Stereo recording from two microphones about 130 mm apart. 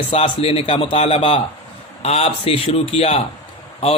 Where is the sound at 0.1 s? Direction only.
50° left (ahead or behind).